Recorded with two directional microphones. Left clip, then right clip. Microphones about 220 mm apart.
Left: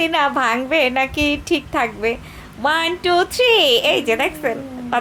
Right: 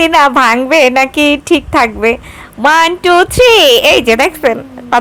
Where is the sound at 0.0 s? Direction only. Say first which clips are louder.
Right 10 dB; 30° right (ahead or behind).